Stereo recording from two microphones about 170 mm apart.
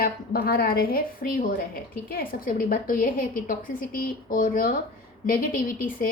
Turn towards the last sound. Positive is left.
turn(degrees=55)  # may be behind; listen again after turning